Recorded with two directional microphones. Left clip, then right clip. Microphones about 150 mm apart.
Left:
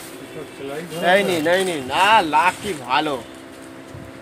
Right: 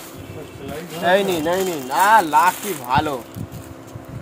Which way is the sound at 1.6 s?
25° right (ahead or behind).